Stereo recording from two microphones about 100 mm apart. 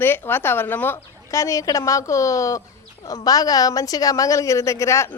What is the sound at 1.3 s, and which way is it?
Speech, 30° left (ahead or behind).